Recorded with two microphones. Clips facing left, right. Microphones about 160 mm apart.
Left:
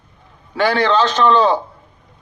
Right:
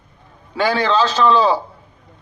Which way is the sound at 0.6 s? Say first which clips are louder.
Left 2 dB; 10° right (ahead or behind).